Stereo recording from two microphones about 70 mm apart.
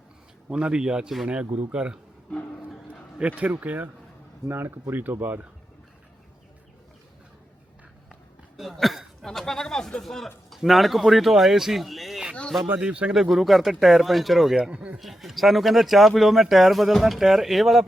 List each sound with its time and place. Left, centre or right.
0.5 s a man's voice: centre
3.2 s speech: centre
4.4 s speech: right
8.5 s a sound: centre
10.5 s speech: centre
12.8 s a man's voice: centre
13.1 s speech: centre
14.7 s speech: centre
14.9 s speech: centre